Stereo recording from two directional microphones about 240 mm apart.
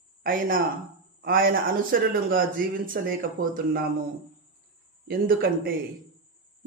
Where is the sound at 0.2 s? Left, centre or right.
Right.